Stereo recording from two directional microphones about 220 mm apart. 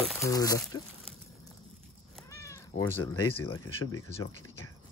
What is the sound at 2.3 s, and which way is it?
Speech, 15° left (ahead or behind).